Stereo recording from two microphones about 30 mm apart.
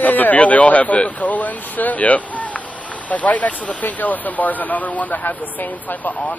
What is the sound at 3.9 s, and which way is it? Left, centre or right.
Speech, left.